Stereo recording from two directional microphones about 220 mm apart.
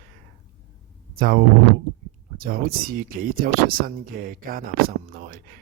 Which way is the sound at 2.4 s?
40° right (ahead or behind).